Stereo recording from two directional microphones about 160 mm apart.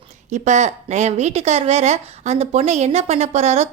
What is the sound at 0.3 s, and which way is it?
Speech, 45° right (ahead or behind).